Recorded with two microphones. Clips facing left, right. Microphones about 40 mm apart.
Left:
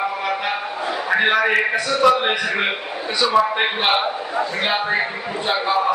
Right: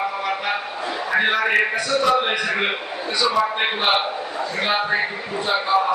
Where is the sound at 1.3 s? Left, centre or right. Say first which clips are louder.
Left 2 dB; left.